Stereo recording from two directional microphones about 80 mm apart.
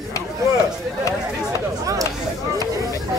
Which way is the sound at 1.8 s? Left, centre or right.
Right.